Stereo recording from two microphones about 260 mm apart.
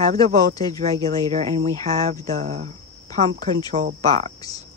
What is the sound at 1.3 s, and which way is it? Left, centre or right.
Speech, right.